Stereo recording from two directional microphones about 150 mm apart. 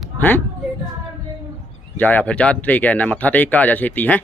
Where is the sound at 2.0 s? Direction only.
10° left (ahead or behind).